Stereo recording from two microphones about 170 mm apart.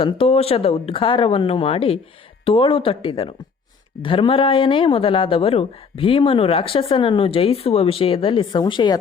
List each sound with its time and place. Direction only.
0.0 s speech: 35° left (ahead or behind)